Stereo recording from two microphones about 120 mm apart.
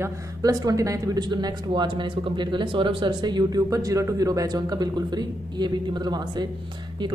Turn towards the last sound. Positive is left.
turn(degrees=-35)  # may be behind; listen again after turning